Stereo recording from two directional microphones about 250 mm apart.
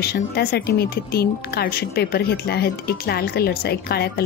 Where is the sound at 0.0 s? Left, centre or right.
Left.